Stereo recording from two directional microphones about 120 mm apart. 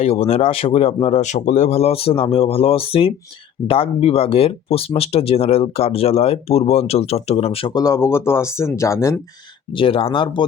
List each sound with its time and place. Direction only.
0.0 s speech: 60° left (ahead or behind)
1.0 s speech: 70° left (ahead or behind); by 7.7 s 55° left (ahead or behind)
7.7 s speech: 30° left (ahead or behind)
9.7 s speech: 50° left (ahead or behind)